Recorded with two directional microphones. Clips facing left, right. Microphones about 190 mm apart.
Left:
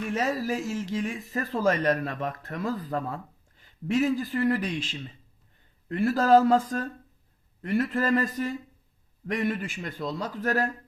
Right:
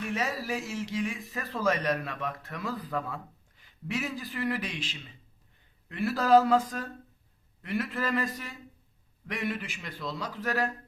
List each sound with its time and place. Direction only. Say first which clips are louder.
0.1 s speech: left 5 dB; 45° left (ahead or behind)